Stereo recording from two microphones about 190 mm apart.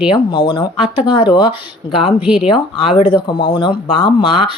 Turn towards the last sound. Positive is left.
turn(degrees=25)  # may be behind; listen again after turning